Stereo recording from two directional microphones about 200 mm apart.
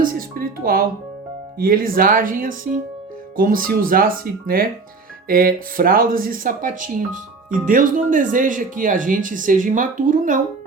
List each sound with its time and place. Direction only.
0.0 s speech: 45° right (ahead or behind)